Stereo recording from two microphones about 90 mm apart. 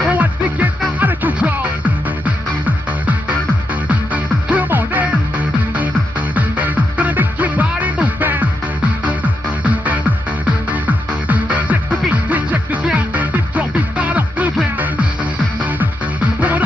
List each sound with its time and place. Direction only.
0.0 s music: 15° right (ahead or behind)
9.6 s music: 15° right (ahead or behind)
16.3 s music: 15° right (ahead or behind)